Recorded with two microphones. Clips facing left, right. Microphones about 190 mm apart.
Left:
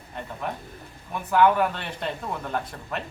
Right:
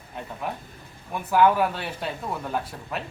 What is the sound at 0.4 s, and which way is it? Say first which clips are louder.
A man's voice: even; 5° right (ahead or behind).